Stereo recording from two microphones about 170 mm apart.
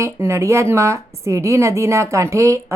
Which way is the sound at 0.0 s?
15° right (ahead or behind).